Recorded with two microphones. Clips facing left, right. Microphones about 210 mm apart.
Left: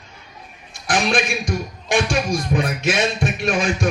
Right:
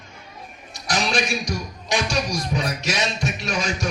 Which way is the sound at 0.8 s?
55° left (ahead or behind).